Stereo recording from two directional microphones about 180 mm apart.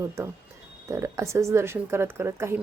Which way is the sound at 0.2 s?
15° right (ahead or behind).